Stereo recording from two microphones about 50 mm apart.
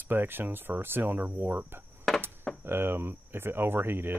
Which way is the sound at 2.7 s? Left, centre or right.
Right.